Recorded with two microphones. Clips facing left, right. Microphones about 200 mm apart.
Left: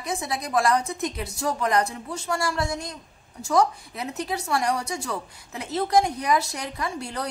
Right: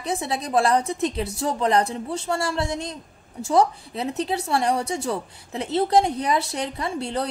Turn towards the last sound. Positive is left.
turn(degrees=-30)  # may be behind; listen again after turning